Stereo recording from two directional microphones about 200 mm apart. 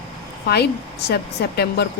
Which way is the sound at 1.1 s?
55° left (ahead or behind).